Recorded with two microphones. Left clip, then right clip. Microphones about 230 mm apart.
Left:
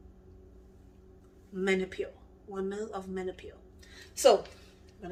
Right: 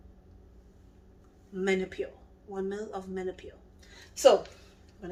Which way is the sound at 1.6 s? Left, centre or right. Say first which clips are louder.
Right 1 dB; centre.